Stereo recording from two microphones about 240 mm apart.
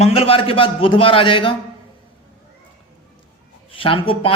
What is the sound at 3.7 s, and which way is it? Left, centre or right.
Speech, left.